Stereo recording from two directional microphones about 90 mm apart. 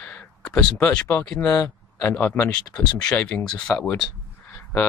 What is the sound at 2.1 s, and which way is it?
Speech, 20° left (ahead or behind).